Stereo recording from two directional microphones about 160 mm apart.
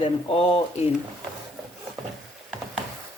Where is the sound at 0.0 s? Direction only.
40° left (ahead or behind).